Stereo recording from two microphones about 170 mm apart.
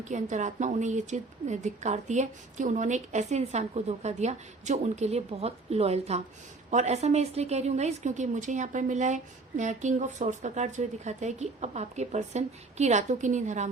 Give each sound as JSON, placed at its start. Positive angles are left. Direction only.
{"t": 0.0, "sound": "a woman's voice", "side_deg": -45}